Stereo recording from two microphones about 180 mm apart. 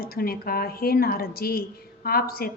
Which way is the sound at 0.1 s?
55° left (ahead or behind).